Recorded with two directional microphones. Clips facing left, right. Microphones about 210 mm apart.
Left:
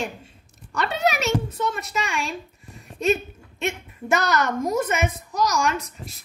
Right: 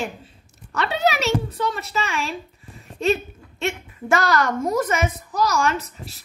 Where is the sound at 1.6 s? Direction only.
Centre (ahead or behind).